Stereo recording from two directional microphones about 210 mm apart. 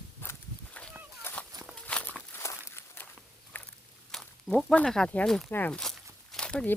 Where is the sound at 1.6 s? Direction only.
5° left (ahead or behind).